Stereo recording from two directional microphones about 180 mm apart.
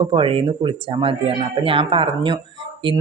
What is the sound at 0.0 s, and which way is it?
Speech, 30° right (ahead or behind).